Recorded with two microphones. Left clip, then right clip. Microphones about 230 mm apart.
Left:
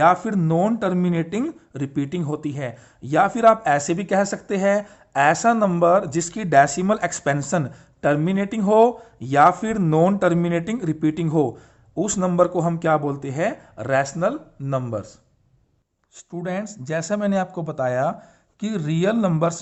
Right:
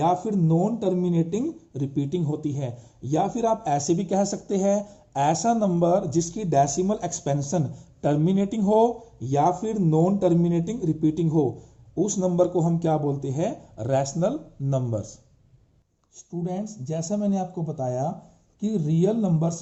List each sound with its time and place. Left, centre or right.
0.0 s a man's voice: left
0.4 s speech: left
1.0 s a man's voice: left
16.4 s a man's voice: left